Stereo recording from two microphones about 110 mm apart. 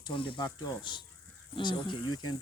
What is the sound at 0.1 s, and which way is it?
Speech, 50° left (ahead or behind).